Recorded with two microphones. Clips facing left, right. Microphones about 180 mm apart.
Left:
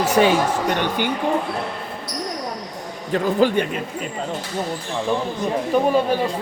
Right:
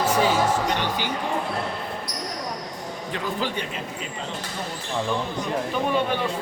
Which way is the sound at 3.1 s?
50° left (ahead or behind).